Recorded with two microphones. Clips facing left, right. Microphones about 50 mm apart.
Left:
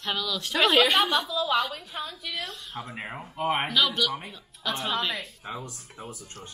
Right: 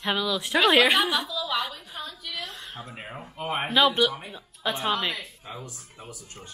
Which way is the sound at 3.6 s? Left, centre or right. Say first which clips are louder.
Right 4 dB; right.